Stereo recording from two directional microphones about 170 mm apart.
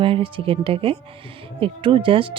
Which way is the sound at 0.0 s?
30° right (ahead or behind).